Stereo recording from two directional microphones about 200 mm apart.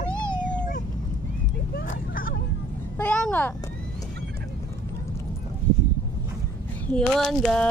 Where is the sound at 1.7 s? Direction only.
45° left (ahead or behind).